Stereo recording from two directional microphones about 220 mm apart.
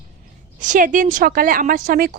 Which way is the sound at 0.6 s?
35° right (ahead or behind).